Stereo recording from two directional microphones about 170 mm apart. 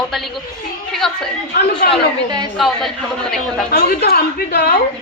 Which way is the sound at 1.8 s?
65° left (ahead or behind).